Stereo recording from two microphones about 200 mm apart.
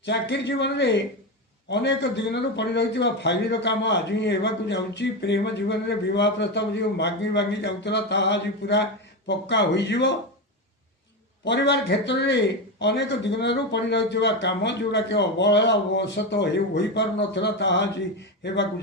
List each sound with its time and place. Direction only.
0.0 s speech: 60° left (ahead or behind)
11.4 s speech: 65° left (ahead or behind)